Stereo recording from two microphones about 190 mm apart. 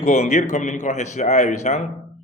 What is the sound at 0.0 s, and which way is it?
A man's voice, 35° left (ahead or behind).